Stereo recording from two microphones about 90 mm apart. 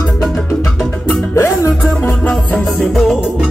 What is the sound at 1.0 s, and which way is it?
Music, 30° left (ahead or behind).